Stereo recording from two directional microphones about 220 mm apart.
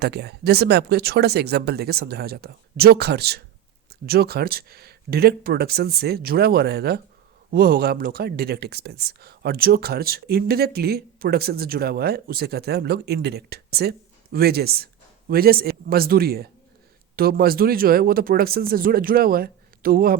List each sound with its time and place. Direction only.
0.0 s speech: 50° right (ahead or behind)